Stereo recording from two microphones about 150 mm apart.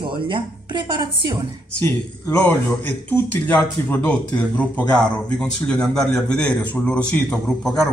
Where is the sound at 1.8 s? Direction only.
10° left (ahead or behind).